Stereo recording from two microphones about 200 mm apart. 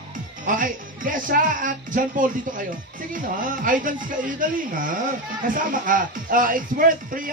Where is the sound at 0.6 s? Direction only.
40° right (ahead or behind).